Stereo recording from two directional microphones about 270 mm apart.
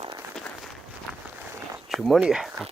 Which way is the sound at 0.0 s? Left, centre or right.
Centre.